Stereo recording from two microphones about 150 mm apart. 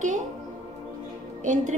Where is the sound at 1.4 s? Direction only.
60° right (ahead or behind).